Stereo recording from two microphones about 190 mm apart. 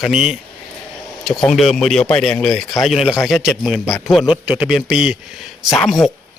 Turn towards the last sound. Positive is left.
turn(degrees=0)  # may be behind; listen again after turning